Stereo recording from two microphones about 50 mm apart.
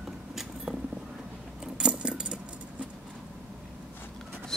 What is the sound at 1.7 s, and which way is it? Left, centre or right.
Keys jangling, centre.